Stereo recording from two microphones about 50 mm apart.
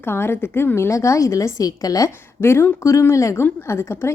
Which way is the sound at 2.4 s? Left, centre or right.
Left.